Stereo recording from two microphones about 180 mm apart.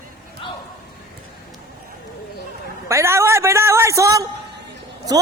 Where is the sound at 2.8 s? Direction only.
15° right (ahead or behind).